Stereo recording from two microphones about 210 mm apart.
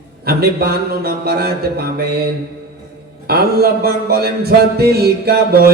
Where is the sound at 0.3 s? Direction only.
45° right (ahead or behind).